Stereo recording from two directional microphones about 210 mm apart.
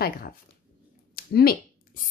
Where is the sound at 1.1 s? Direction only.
45° left (ahead or behind).